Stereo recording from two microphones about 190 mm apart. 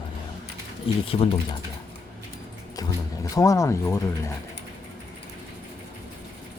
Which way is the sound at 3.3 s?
15° left (ahead or behind).